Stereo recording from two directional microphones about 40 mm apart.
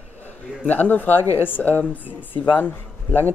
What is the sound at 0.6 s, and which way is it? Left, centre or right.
Speech, left.